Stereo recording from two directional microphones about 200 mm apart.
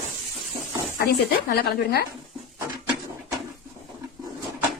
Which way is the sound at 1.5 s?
55° left (ahead or behind).